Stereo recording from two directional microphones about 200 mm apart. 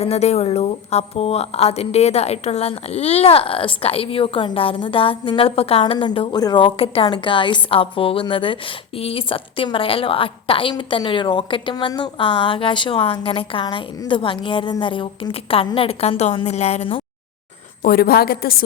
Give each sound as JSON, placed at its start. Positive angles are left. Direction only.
{"t": 0.0, "sound": "a woman's voice", "side_deg": 30}
{"t": 17.8, "sound": "a woman's voice", "side_deg": 50}